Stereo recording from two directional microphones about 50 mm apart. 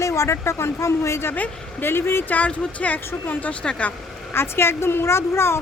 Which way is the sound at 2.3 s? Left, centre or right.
Left.